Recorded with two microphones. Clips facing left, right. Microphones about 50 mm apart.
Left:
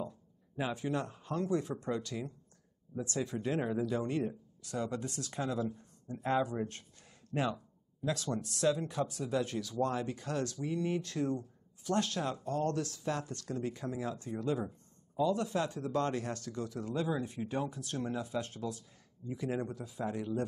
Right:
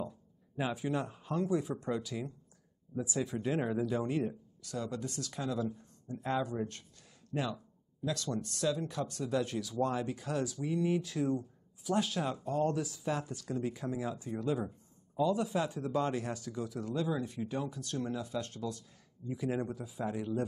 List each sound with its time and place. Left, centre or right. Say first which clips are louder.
0.0 s speech: even; centre
4.6 s speech: left 1 dB; left
5.7 s a sound: even; centre
6.1 s speech: left 2 dB; centre
7.5 s a sound: right 1 dB; centre
8.7 s speech: left 1 dB; centre
16.8 s speech: even; centre
19.2 s speech: right 1 dB; centre